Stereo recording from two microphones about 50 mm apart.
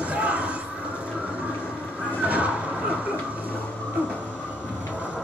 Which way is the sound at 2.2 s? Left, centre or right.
Right.